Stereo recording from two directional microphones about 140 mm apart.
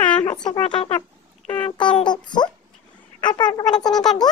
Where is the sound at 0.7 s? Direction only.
40° left (ahead or behind).